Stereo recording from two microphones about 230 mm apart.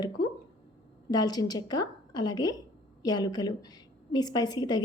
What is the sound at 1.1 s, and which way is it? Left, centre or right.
A woman's voice, centre.